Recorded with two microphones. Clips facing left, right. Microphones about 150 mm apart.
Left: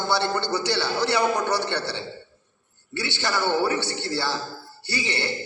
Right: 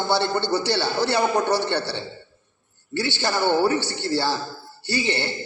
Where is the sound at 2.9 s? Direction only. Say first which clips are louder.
Right 3 dB; 25° right (ahead or behind).